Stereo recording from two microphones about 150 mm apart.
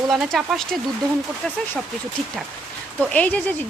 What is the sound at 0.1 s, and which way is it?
Speech, centre (ahead or behind).